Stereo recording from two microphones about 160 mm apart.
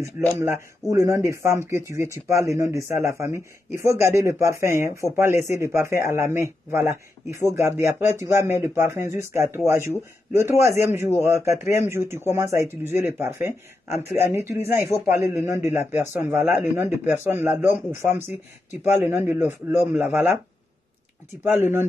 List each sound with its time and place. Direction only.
0.4 s speech: 15° right (ahead or behind)
21.5 s speech: 15° right (ahead or behind)